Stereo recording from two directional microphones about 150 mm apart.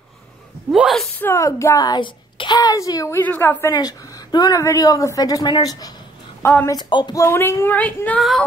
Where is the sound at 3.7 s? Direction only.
30° left (ahead or behind).